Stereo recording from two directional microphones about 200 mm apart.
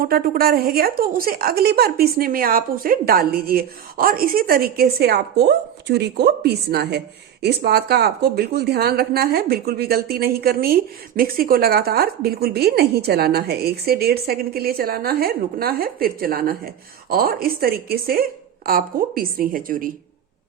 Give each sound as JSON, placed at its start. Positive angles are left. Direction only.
{"t": 0.0, "sound": "a woman's voice", "side_deg": -50}